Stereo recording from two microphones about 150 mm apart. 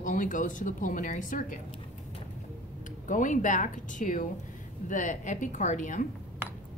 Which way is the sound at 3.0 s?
60° left (ahead or behind).